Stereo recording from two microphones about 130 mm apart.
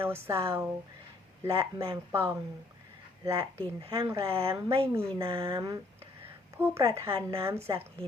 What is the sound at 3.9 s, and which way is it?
Speech, 25° right (ahead or behind).